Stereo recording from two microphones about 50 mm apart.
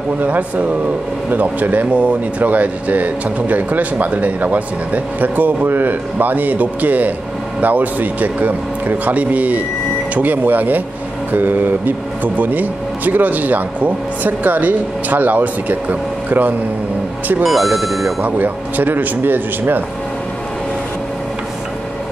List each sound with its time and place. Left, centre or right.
0.2 s speech: right
17.4 s speech: centre
18.2 s speech: right